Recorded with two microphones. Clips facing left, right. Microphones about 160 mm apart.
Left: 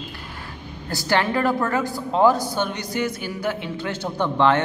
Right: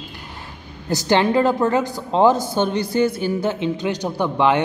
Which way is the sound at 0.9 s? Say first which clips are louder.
Right 5 dB; 20° right (ahead or behind).